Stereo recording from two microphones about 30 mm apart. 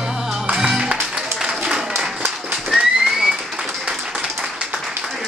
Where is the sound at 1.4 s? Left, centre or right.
Right.